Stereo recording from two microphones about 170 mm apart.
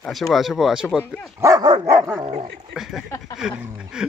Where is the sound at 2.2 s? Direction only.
35° right (ahead or behind).